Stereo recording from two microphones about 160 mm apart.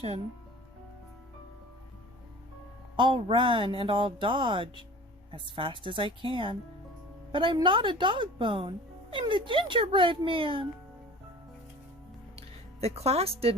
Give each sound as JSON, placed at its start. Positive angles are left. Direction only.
{"t": 2.9, "sound": "speech", "side_deg": -30}
{"t": 12.4, "sound": "speech", "side_deg": -40}